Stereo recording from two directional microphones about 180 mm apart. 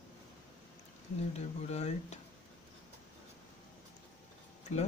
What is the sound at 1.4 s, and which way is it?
Speech, 35° left (ahead or behind).